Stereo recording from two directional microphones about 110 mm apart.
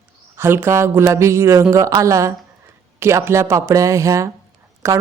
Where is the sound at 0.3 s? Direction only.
20° right (ahead or behind).